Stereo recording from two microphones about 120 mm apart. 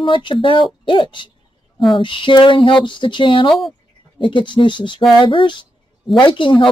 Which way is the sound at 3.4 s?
Centre (ahead or behind).